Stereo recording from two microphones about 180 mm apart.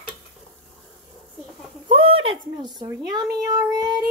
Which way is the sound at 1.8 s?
30° right (ahead or behind).